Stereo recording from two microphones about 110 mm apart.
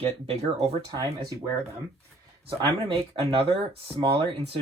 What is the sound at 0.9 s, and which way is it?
Speech, 35° right (ahead or behind).